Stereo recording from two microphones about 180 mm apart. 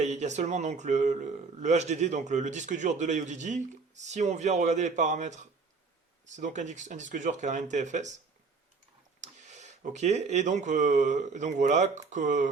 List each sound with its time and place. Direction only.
0.0 s a man's voice: 40° right (ahead or behind)
9.2 s speech: 40° right (ahead or behind)